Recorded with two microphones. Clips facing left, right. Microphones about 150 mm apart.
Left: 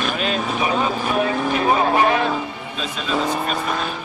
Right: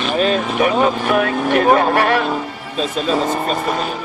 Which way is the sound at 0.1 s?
40° right (ahead or behind).